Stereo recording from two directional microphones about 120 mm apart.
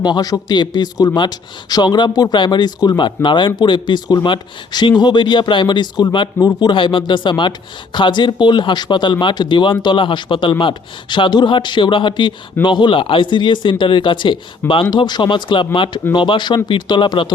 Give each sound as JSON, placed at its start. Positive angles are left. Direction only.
{"t": 0.0, "sound": "speech", "side_deg": 35}